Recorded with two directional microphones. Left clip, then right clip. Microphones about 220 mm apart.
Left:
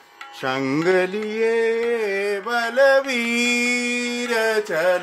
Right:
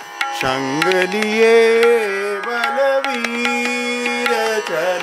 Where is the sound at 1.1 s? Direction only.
40° right (ahead or behind).